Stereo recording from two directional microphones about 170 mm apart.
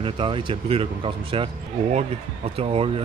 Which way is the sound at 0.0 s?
30° right (ahead or behind).